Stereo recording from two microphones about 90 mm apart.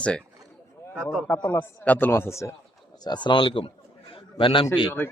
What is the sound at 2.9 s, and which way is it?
Speech, 50° left (ahead or behind).